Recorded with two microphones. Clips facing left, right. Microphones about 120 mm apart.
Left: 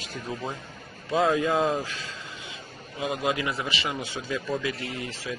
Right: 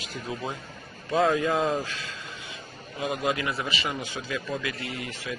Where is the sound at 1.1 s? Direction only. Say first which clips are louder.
Even; 20° left (ahead or behind).